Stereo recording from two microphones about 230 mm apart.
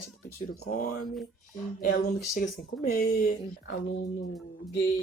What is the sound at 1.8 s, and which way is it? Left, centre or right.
Speech, left.